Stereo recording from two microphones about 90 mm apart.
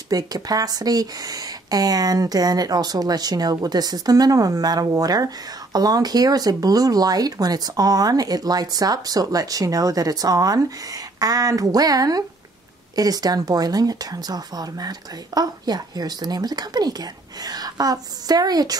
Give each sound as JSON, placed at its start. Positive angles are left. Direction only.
{"t": 0.1, "sound": "speech", "side_deg": -45}